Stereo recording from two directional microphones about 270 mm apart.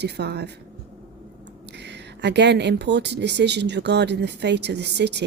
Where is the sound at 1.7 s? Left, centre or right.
Right.